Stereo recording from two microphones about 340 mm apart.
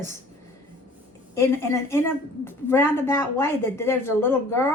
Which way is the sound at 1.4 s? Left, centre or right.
Centre.